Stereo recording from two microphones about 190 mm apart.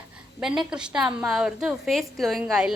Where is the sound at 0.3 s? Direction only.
5° right (ahead or behind).